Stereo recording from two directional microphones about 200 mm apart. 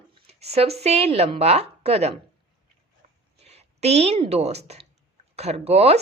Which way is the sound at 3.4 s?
30° right (ahead or behind).